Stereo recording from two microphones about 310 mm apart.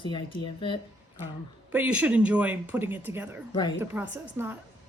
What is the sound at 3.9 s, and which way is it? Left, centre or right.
Speech, centre.